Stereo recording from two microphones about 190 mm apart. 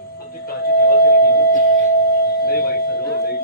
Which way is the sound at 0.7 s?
50° left (ahead or behind).